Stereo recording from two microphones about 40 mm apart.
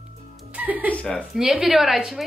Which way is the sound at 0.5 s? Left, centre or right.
Right.